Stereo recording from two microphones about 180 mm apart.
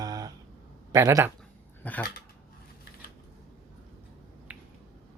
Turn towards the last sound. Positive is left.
turn(degrees=-10)  # may be behind; listen again after turning